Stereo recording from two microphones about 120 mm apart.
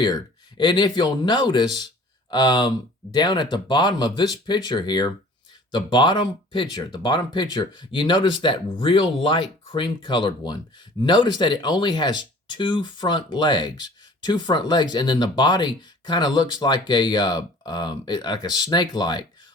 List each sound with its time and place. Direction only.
0.0 s speech: 40° left (ahead or behind)